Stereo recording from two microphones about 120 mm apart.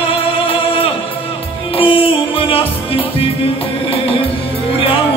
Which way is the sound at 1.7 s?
50° left (ahead or behind).